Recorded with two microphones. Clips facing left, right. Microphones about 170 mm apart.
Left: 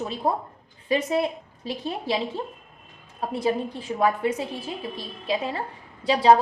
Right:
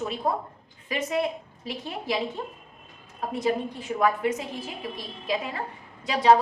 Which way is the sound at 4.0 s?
30° left (ahead or behind).